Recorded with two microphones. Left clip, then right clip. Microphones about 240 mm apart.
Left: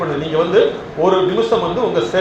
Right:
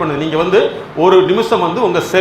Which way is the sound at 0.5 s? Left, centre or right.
Right.